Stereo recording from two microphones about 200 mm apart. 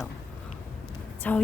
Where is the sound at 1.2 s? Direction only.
5° left (ahead or behind).